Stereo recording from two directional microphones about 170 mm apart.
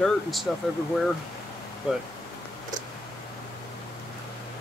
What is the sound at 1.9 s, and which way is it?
Speech, 5° right (ahead or behind).